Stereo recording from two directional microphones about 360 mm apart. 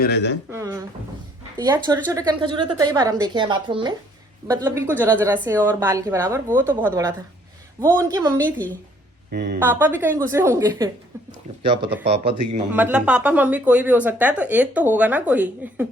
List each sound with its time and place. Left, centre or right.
0.0 s speech: left
0.5 s a sound: centre
1.5 s a woman's voice: centre
9.3 s speech: right
9.6 s a woman's voice: centre
12.7 s a woman's voice: centre